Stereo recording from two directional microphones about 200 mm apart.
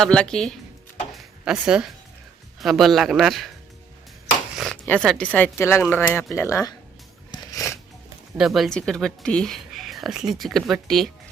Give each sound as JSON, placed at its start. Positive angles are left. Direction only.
{"t": 0.0, "sound": "speech", "side_deg": 5}
{"t": 1.1, "sound": "a sound", "side_deg": -5}
{"t": 2.6, "sound": "speech", "side_deg": 0}
{"t": 4.5, "sound": "speech", "side_deg": 0}
{"t": 7.3, "sound": "a sound", "side_deg": 15}
{"t": 8.4, "sound": "speech", "side_deg": 0}